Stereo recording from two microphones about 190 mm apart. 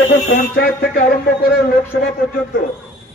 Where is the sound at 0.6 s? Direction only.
50° left (ahead or behind).